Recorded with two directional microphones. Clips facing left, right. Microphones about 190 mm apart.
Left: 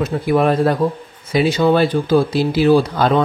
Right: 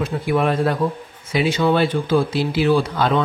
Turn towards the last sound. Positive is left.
turn(degrees=40)  # may be behind; listen again after turning